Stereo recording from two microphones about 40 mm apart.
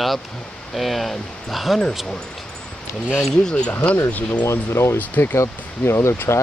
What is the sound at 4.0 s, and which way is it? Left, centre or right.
Speech, left.